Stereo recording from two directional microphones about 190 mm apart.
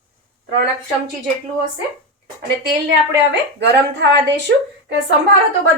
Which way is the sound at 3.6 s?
65° right (ahead or behind).